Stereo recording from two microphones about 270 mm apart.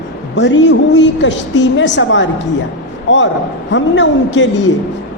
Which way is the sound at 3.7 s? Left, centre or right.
Left.